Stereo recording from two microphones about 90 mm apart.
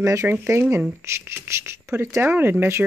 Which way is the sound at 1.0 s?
30° right (ahead or behind).